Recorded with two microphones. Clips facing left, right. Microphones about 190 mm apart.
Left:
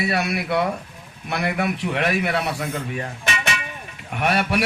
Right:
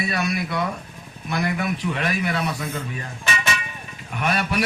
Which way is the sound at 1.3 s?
65° left (ahead or behind).